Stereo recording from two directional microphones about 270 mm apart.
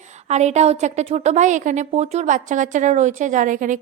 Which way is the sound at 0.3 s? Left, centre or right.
Right.